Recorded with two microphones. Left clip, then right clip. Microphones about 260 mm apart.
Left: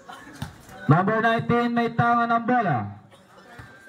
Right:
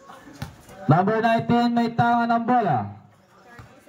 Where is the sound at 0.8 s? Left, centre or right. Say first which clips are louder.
Right 1 dB; centre.